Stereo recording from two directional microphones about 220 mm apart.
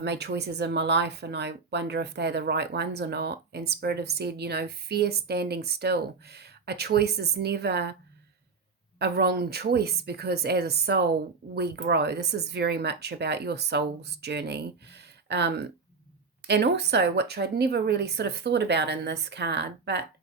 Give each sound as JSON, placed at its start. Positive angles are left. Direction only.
{"t": 0.0, "sound": "speech", "side_deg": -50}
{"t": 9.0, "sound": "speech", "side_deg": -45}